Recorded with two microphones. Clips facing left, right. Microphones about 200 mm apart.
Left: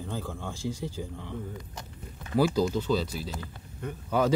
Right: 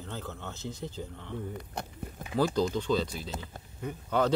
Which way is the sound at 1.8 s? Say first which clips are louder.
Right 6 dB; 60° right (ahead or behind).